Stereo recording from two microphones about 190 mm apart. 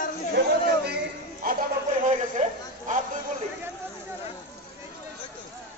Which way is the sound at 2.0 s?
40° right (ahead or behind).